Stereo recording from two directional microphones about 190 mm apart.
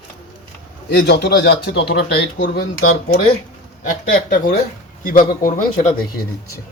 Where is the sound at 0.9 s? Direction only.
55° left (ahead or behind).